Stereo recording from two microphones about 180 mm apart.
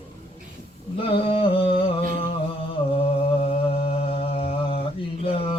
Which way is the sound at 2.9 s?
30° left (ahead or behind).